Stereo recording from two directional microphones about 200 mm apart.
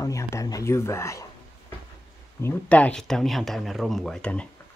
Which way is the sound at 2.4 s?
5° left (ahead or behind).